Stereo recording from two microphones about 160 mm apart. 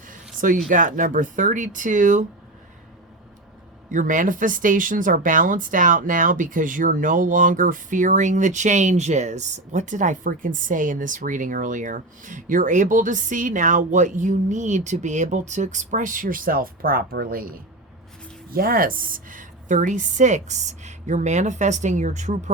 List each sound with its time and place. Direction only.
0.7 s speech: 55° right (ahead or behind)
3.9 s speech: 55° right (ahead or behind)
18.5 s a woman's voice: 65° right (ahead or behind); by 22.5 s 50° right (ahead or behind)